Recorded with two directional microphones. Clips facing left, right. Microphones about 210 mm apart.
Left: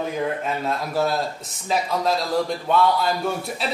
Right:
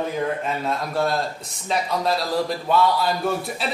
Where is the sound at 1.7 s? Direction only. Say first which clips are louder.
Left 1 dB; centre (ahead or behind).